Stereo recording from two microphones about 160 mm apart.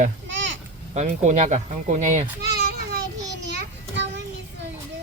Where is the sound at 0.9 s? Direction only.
50° right (ahead or behind).